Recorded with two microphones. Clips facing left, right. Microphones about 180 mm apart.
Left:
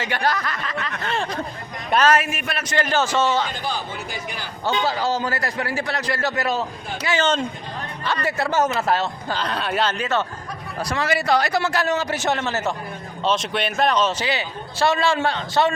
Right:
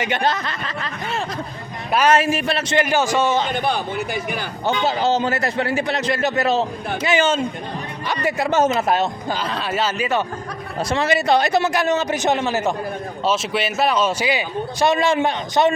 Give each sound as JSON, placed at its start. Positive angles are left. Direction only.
{"t": 0.0, "sound": "a man's voice", "side_deg": -20}
{"t": 1.0, "sound": "speech", "side_deg": -5}
{"t": 2.0, "sound": "a man's voice", "side_deg": -30}
{"t": 2.7, "sound": "a man's voice", "side_deg": -15}
{"t": 3.5, "sound": "a man's voice", "side_deg": -60}
{"t": 4.6, "sound": "a man's voice", "side_deg": -20}
{"t": 7.0, "sound": "a man's voice", "side_deg": -15}
{"t": 9.4, "sound": "speech", "side_deg": 0}
{"t": 10.8, "sound": "a man's voice", "side_deg": -25}